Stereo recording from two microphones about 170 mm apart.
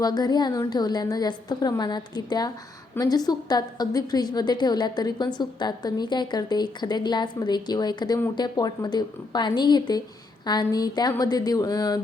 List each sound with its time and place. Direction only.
0.0 s a woman's voice: 25° left (ahead or behind)